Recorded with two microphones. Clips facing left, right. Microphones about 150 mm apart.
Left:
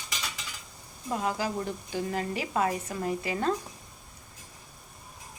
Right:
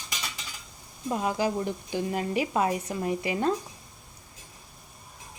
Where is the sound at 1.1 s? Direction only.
20° right (ahead or behind).